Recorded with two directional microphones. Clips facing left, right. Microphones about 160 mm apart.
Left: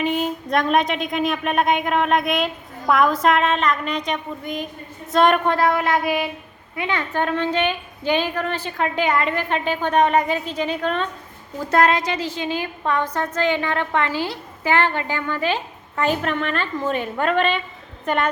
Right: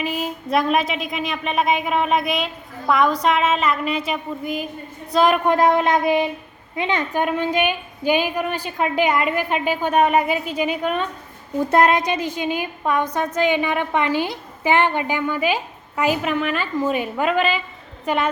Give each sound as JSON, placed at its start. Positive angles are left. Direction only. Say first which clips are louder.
{"t": 0.0, "sound": "a woman's voice", "louder": "left 3 dB", "side_deg": -5}
{"t": 5.5, "sound": "a woman's voice", "louder": "right 3 dB", "side_deg": -20}